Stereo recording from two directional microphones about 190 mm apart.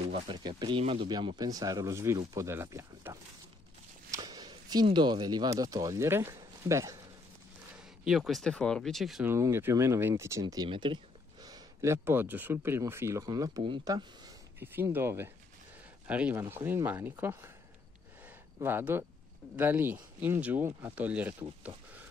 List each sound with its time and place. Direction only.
0.1 s speech: 25° right (ahead or behind)
4.1 s a sound: 20° right (ahead or behind)
5.6 s speech: 20° right (ahead or behind)
7.7 s speech: centre (ahead or behind)
9.3 s speech: 15° right (ahead or behind)
18.6 s speech: 10° right (ahead or behind)